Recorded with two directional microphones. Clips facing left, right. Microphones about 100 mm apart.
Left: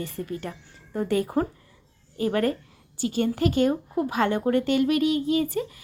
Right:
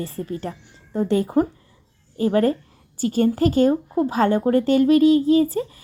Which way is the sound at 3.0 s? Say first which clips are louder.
Right 5 dB; 40° right (ahead or behind).